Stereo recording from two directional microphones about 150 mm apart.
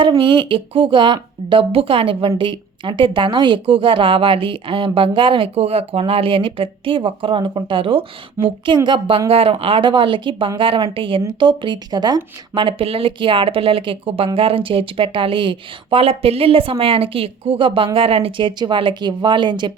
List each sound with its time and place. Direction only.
0.0 s a woman's voice: 35° right (ahead or behind)